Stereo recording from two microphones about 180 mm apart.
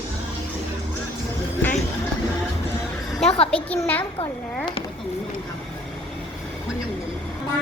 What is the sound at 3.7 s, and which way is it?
Speech, 10° left (ahead or behind).